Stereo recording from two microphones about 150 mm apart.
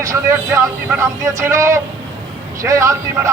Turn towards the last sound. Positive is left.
turn(degrees=-20)  # may be behind; listen again after turning